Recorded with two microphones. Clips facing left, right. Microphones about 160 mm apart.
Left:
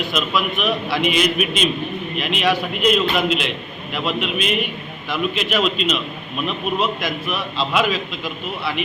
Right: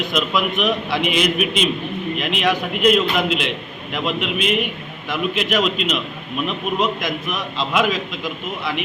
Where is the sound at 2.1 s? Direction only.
15° right (ahead or behind).